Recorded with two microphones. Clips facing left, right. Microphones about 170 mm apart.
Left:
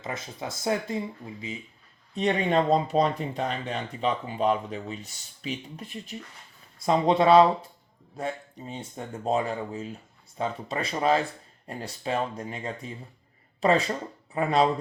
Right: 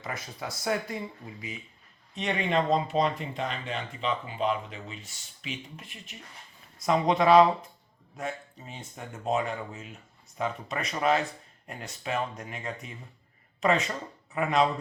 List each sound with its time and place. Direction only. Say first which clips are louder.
0.0 s speech: left 2 dB; 25° left (ahead or behind)
2.1 s speech: left 4 dB; 35° left (ahead or behind)